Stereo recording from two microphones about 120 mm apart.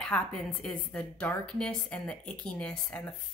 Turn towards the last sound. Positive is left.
turn(degrees=10)  # may be behind; listen again after turning